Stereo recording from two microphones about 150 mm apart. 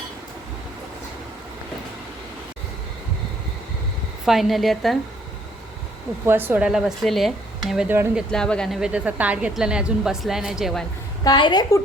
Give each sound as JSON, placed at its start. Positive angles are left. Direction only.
{"t": 4.3, "sound": "a woman's voice", "side_deg": 0}
{"t": 6.2, "sound": "a woman's voice", "side_deg": -15}
{"t": 7.9, "sound": "speech", "side_deg": -10}
{"t": 8.3, "sound": "a woman's voice", "side_deg": 5}
{"t": 11.2, "sound": "a woman's voice", "side_deg": 30}